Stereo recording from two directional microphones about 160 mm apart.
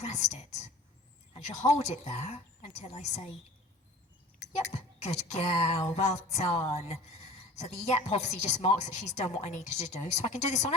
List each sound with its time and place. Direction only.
0.0 s a woman's voice: 45° left (ahead or behind)
4.7 s a woman's voice: 45° left (ahead or behind)